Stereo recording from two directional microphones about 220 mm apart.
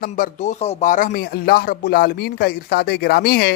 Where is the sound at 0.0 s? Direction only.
35° left (ahead or behind).